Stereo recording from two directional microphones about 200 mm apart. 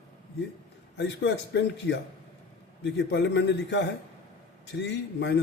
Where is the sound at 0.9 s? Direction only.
60° left (ahead or behind).